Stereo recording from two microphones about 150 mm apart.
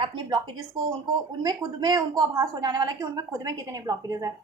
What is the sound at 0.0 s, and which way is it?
A woman's voice, 30° right (ahead or behind).